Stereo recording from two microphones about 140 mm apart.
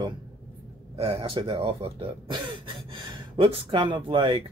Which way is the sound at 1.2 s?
40° right (ahead or behind).